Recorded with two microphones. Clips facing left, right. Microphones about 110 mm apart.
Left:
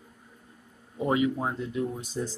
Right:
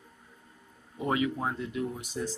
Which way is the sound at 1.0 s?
20° left (ahead or behind).